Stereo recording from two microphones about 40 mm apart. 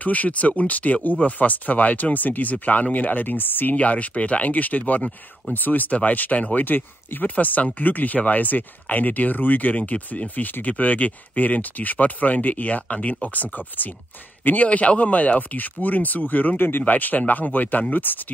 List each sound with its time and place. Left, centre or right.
0.0 s speech: left
3.7 s speech: left